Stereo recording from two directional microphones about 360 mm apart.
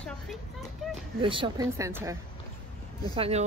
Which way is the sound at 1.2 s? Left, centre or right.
Centre.